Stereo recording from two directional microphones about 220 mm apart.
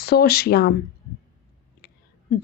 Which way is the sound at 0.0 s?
45° left (ahead or behind).